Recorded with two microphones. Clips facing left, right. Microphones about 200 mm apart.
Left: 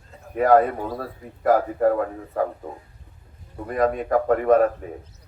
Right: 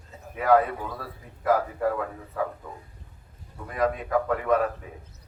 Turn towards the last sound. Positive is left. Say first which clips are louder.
# left 7 dB
turn(degrees=45)  # may be behind; listen again after turning